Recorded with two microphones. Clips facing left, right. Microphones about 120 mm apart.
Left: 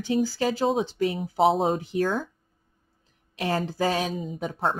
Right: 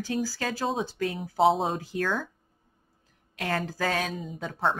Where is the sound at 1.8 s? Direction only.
20° left (ahead or behind).